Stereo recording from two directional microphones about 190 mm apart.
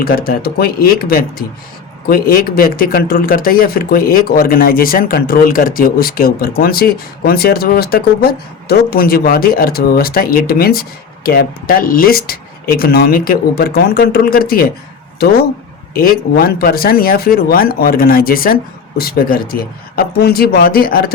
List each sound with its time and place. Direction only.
0.2 s speech: 55° left (ahead or behind)